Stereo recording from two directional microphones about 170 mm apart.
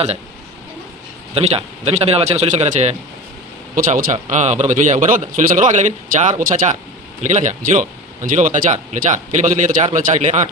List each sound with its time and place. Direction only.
1.4 s a man's voice: 35° right (ahead or behind)